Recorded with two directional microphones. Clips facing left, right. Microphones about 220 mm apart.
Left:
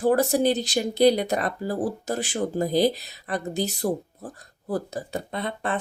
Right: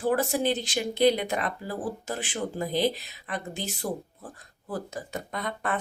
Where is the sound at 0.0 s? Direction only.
40° left (ahead or behind).